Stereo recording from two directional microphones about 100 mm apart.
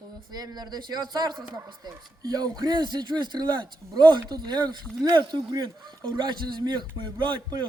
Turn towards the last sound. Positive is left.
turn(degrees=-50)  # may be behind; listen again after turning